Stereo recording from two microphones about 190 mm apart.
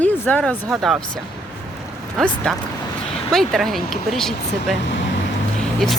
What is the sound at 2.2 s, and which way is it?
Speech, centre (ahead or behind).